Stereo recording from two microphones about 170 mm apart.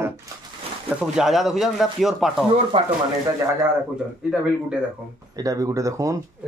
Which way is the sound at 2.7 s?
40° right (ahead or behind).